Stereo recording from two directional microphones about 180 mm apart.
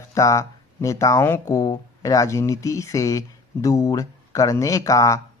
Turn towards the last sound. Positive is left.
turn(degrees=20)  # may be behind; listen again after turning